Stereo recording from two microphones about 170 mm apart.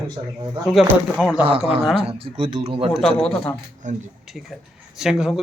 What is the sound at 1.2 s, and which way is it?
Speech, 5° right (ahead or behind).